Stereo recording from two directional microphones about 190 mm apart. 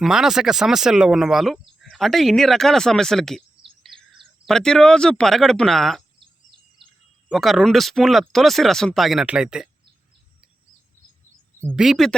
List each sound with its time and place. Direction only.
0.0 s speech: centre (ahead or behind)
4.4 s speech: 5° left (ahead or behind)
6.1 s a sound: 25° right (ahead or behind)
7.3 s speech: centre (ahead or behind)
11.6 s speech: 5° right (ahead or behind)